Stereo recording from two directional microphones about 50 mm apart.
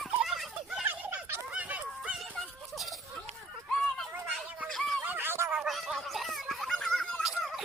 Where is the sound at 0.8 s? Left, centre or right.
Right.